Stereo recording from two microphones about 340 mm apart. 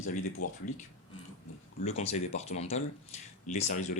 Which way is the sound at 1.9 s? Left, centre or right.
Centre.